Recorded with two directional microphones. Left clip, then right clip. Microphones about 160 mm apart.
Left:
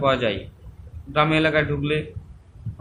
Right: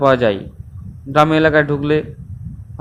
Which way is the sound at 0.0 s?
45° right (ahead or behind).